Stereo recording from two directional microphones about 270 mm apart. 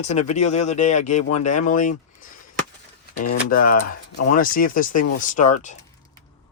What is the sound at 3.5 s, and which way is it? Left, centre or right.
Speech, left.